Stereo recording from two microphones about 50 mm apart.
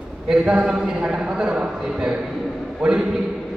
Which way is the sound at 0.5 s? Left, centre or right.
Centre.